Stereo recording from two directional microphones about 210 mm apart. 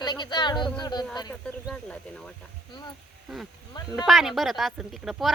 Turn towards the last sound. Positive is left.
turn(degrees=0)  # may be behind; listen again after turning